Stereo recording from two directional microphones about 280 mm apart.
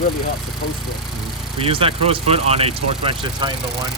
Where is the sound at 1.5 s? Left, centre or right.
Centre.